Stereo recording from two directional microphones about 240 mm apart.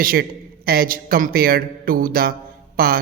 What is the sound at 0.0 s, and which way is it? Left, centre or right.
A man's voice, right.